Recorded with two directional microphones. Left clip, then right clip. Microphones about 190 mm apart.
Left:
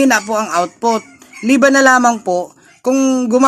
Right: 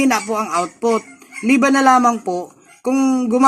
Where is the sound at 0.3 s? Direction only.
50° left (ahead or behind).